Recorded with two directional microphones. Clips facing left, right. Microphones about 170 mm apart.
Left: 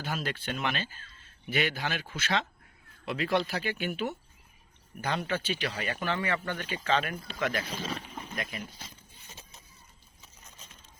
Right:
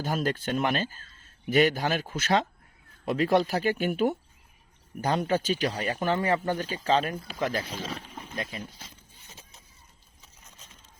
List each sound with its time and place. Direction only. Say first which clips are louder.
0.0 s speech: right 6 dB; 45° right (ahead or behind)